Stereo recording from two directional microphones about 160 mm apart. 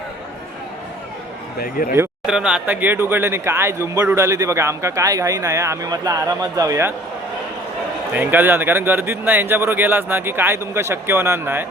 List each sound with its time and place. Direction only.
1.5 s speech: 65° left (ahead or behind)
2.2 s speech: 5° right (ahead or behind)
8.1 s speech: 10° right (ahead or behind)